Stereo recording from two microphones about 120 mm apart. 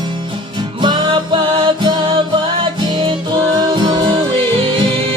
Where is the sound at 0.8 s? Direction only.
40° right (ahead or behind).